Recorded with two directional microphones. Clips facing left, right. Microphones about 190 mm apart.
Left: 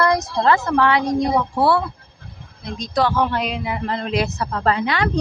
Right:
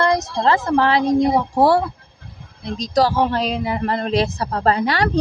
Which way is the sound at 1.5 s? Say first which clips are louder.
Right 4 dB; 40° right (ahead or behind).